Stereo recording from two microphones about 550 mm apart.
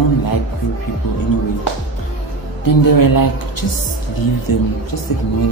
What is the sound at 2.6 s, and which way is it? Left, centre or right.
Speech, left.